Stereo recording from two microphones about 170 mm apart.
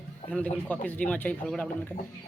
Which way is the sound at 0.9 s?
10° left (ahead or behind).